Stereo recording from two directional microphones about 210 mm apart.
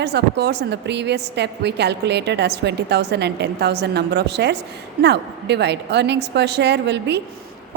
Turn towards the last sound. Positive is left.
turn(degrees=-55)  # may be behind; listen again after turning